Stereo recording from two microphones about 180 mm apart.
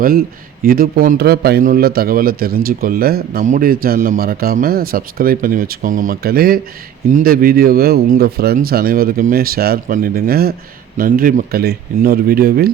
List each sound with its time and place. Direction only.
0.6 s a man's voice: 55° right (ahead or behind)